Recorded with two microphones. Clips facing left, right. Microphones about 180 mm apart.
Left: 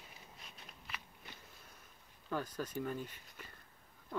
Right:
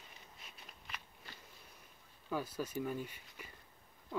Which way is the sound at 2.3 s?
10° right (ahead or behind).